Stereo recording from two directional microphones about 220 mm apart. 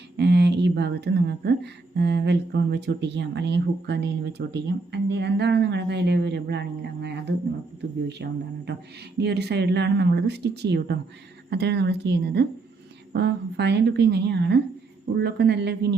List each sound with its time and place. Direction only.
0.2 s speech: 50° right (ahead or behind)